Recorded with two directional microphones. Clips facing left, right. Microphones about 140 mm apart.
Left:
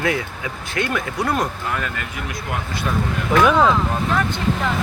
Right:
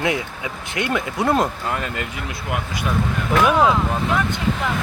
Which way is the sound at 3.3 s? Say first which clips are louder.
Left 1 dB; 10° right (ahead or behind).